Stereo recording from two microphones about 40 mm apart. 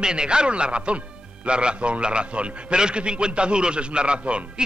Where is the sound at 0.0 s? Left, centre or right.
Right.